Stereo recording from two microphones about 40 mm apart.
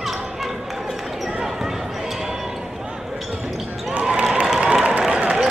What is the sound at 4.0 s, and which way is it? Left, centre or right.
Basketball bounce, right.